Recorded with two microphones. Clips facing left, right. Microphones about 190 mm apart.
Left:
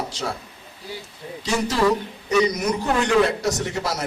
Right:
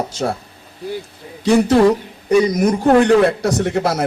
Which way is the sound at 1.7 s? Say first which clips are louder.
Right 8 dB; 55° right (ahead or behind).